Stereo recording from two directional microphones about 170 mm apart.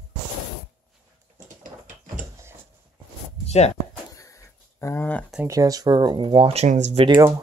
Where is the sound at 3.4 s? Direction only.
40° left (ahead or behind).